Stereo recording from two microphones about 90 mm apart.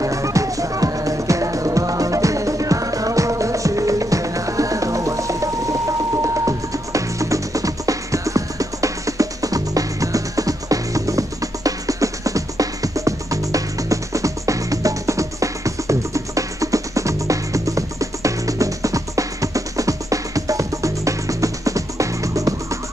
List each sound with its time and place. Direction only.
0.0 s music: 35° right (ahead or behind)